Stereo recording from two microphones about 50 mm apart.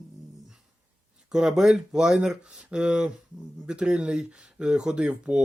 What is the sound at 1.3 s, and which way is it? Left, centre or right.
Speech, centre.